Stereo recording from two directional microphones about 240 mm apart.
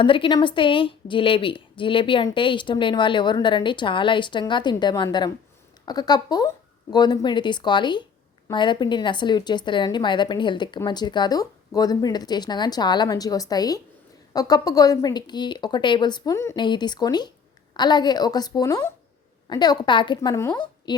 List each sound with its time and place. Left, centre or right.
0.0 s a woman's voice: left